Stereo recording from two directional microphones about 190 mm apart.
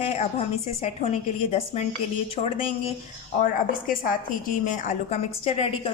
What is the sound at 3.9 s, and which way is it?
A woman's voice, 45° left (ahead or behind).